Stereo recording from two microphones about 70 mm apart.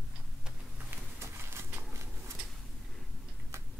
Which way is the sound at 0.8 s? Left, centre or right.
Right.